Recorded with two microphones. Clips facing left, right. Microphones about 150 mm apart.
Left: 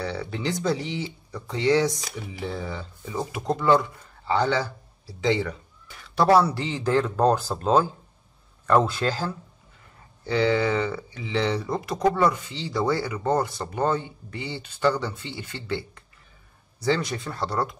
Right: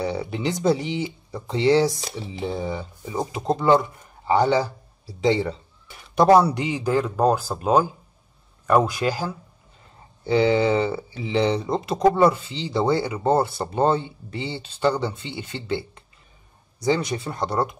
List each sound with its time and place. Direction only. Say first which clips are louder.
0.0 s speech: right 4 dB; 20° right (ahead or behind)